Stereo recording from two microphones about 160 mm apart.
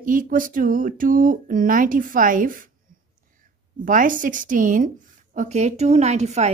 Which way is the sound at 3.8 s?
55° right (ahead or behind).